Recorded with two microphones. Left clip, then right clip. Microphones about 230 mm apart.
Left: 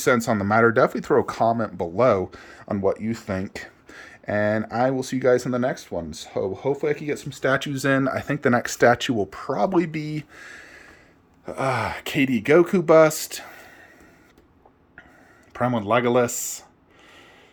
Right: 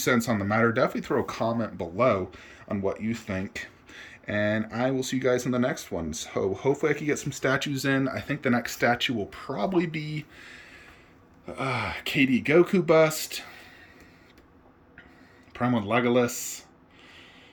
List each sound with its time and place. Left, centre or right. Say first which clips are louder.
0.0 s speech: left 5 dB; centre
15.5 s speech: left 4 dB; centre